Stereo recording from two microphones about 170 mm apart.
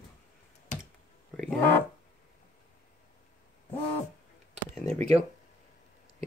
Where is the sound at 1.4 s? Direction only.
5° left (ahead or behind).